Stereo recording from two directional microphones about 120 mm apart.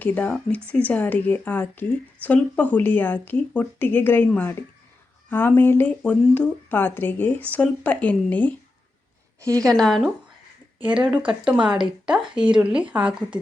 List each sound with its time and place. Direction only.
0.0 s speech: 15° left (ahead or behind)
9.4 s a woman's voice: 30° right (ahead or behind)
9.6 s speech: 5° left (ahead or behind)